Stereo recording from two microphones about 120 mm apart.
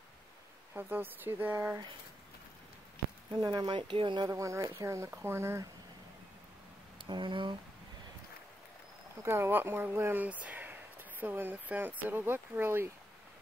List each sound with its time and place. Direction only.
0.7 s speech: 15° right (ahead or behind)
3.3 s speech: 35° right (ahead or behind)
4.3 s speech: 25° right (ahead or behind)
7.1 s speech: 40° right (ahead or behind)
9.2 s speech: 20° right (ahead or behind)